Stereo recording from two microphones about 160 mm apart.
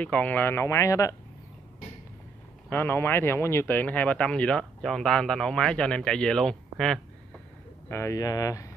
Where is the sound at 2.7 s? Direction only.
15° left (ahead or behind).